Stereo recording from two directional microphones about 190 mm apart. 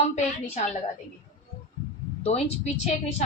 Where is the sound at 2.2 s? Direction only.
35° left (ahead or behind).